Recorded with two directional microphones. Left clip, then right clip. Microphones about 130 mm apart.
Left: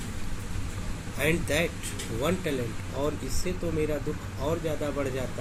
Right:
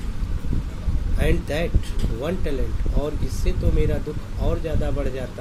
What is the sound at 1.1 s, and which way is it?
Speech, 10° right (ahead or behind).